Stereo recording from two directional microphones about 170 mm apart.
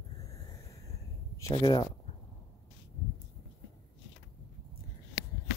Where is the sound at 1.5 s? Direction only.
25° left (ahead or behind).